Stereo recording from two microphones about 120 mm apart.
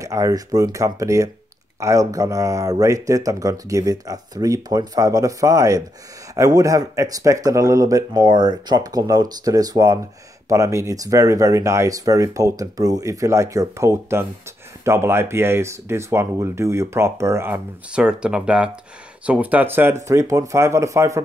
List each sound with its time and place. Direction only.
0.0 s speech: 25° right (ahead or behind)
17.9 s speech: 10° right (ahead or behind); by 21.2 s 25° right (ahead or behind)